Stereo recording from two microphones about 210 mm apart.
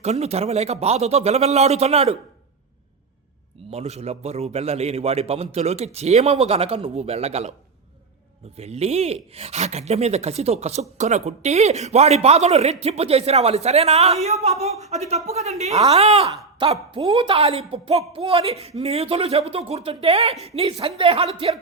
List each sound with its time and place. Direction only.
0.0 s speech: 30° right (ahead or behind)
3.7 s a man's voice: 30° right (ahead or behind)
8.5 s a man's voice: 30° right (ahead or behind)